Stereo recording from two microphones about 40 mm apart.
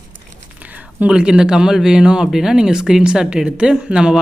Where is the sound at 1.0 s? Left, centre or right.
Right.